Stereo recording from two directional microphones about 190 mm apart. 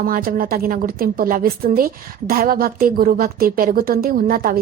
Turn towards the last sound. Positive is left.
turn(degrees=-50)  # may be behind; listen again after turning